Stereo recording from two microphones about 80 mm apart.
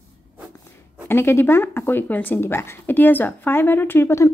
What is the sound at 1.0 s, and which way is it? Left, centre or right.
A woman's voice, left.